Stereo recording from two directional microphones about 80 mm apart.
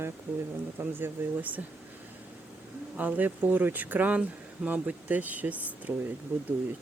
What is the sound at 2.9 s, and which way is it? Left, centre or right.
Speech, centre.